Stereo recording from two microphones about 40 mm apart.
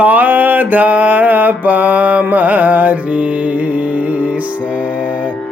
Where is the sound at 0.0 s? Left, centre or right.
Right.